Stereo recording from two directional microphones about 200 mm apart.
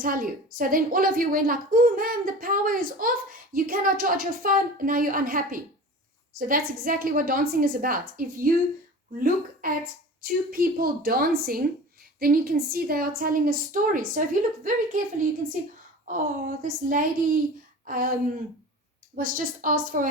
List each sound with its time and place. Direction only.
0.0 s a woman's voice: 45° right (ahead or behind)